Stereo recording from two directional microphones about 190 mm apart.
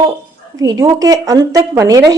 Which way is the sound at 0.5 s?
20° right (ahead or behind).